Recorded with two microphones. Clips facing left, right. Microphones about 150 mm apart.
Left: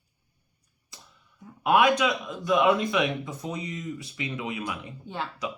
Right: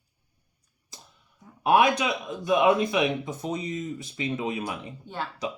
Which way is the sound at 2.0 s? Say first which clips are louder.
Left 1 dB; 25° right (ahead or behind).